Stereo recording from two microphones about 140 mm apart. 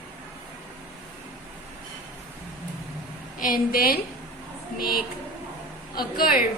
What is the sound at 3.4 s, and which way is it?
Speech, 90° left.